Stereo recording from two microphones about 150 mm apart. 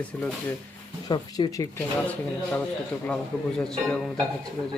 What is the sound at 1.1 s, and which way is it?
Speech, 25° left (ahead or behind).